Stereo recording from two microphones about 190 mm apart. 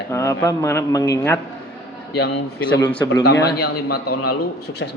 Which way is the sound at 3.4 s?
55° left (ahead or behind).